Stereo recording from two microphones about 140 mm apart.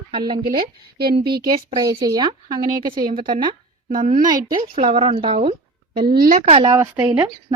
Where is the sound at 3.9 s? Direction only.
75° right (ahead or behind).